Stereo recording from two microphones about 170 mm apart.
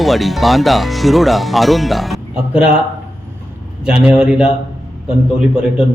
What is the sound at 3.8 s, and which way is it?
Speech, 5° right (ahead or behind).